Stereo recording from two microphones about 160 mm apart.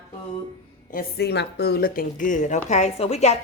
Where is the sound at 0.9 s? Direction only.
75° left (ahead or behind); by 3.3 s 45° left (ahead or behind).